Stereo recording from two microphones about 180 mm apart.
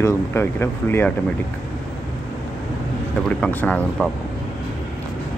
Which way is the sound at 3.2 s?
5° left (ahead or behind).